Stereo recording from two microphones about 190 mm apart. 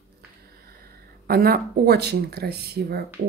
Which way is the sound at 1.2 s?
55° right (ahead or behind).